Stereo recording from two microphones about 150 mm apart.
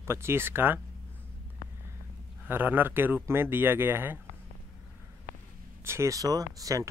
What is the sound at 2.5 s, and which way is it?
Speech, 15° right (ahead or behind).